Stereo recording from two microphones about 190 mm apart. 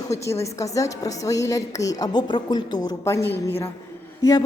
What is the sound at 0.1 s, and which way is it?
A woman's voice, 15° left (ahead or behind).